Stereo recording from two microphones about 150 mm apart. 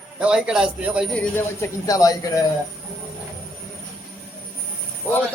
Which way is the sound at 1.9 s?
25° left (ahead or behind).